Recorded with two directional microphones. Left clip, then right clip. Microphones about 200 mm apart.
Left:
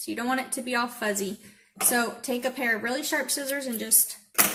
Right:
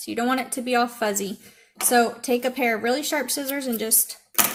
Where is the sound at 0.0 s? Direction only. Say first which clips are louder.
Right 4 dB; 35° right (ahead or behind).